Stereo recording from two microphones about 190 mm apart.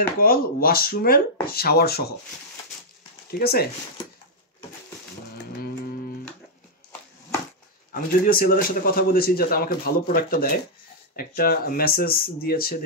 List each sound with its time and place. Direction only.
0.2 s a man's voice: 50° left (ahead or behind)
3.3 s speech: 55° left (ahead or behind)
7.9 s a man's voice: 50° left (ahead or behind)